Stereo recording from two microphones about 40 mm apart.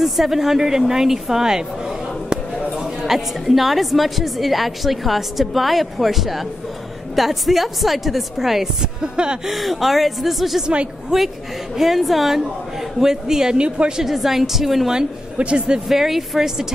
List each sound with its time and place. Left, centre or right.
0.0 s a woman's voice: centre
2.8 s a woman's voice: centre
8.8 s speech: right
9.5 s a woman's voice: centre
13.0 s a woman's voice: centre
13.6 s speech: right
14.0 s a woman's voice: centre
15.3 s speech: right
15.9 s a woman's voice: centre